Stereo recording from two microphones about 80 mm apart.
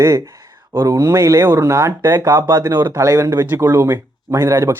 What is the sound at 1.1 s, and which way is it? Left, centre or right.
A man's voice, right.